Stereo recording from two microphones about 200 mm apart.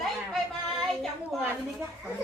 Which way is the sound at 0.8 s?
Centre (ahead or behind).